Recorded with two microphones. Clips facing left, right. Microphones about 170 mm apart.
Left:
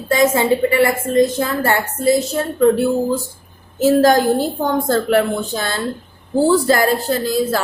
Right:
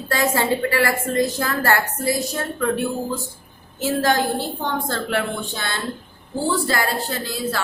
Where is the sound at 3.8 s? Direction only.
40° left (ahead or behind).